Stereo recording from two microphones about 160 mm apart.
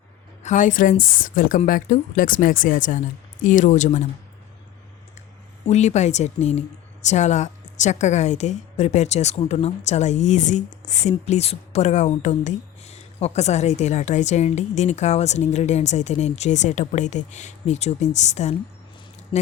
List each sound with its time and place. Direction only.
0.4 s a woman's voice: 55° left (ahead or behind)
5.6 s a woman's voice: 45° left (ahead or behind)